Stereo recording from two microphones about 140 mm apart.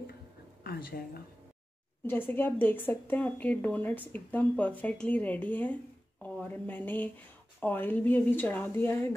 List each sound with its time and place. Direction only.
0.7 s speech: 90° left
2.0 s a woman's voice: 15° left (ahead or behind)